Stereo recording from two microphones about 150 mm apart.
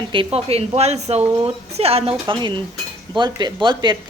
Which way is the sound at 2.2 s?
30° right (ahead or behind).